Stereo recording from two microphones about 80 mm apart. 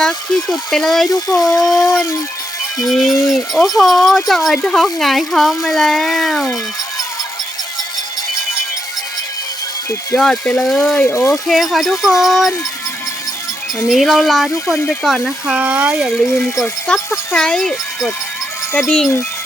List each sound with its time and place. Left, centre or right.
0.0 s speech: centre
10.2 s speech: centre
11.0 s speech: left
11.3 s speech: centre
13.9 s speech: centre
15.5 s speech: centre
16.9 s speech: centre